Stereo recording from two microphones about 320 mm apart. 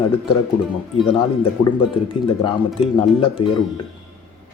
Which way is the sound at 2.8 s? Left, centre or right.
Centre.